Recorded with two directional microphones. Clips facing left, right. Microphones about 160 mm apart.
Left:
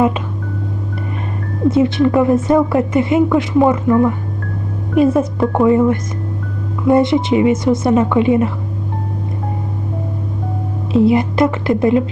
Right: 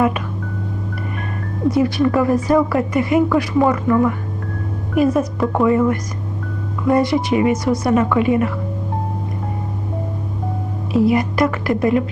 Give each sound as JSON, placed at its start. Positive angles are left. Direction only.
{"t": 1.7, "sound": "speech", "side_deg": 25}
{"t": 6.8, "sound": "speech", "side_deg": 25}
{"t": 10.9, "sound": "speech", "side_deg": 25}